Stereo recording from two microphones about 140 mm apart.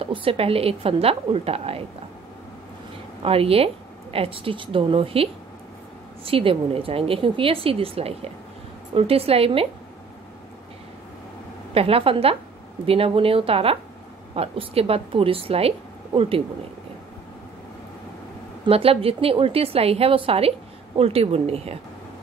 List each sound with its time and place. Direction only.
0.0 s a woman's voice: 40° right (ahead or behind)
3.2 s a woman's voice: 45° right (ahead or behind)
11.7 s a woman's voice: 45° right (ahead or behind)
18.7 s a woman's voice: 45° right (ahead or behind)